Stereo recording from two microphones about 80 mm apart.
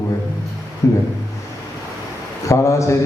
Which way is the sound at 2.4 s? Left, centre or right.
Left.